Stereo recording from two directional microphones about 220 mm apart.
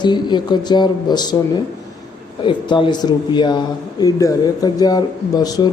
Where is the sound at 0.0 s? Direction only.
20° left (ahead or behind).